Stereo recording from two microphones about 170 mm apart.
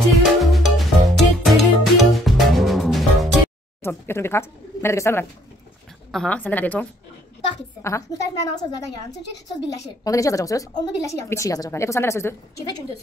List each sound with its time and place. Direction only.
0.1 s music: centre (ahead or behind)
3.8 s a sound: 15° left (ahead or behind)
6.1 s a woman's voice: 10° left (ahead or behind)
10.0 s a woman's voice: 20° left (ahead or behind)